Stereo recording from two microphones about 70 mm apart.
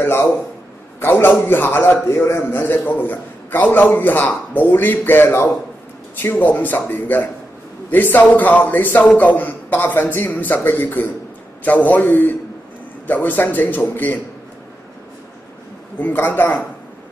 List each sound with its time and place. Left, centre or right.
0.0 s a man's voice: left
16.0 s a man's voice: left